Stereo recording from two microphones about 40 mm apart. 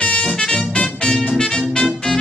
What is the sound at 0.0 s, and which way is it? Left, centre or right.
Music, left.